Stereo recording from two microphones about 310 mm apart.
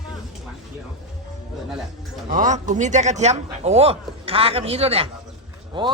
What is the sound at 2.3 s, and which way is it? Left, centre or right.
A man's voice, right.